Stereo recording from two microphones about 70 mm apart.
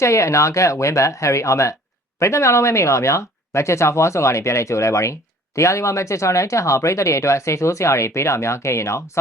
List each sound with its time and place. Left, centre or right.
0.0 s speech: left